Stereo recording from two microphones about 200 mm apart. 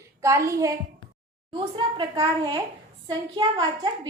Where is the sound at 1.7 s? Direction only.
20° right (ahead or behind).